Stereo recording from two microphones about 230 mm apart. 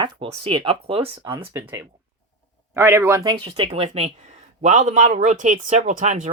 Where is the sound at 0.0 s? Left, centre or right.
Right.